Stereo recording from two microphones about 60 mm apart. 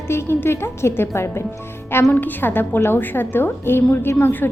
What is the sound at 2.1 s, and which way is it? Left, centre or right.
A woman's voice, left.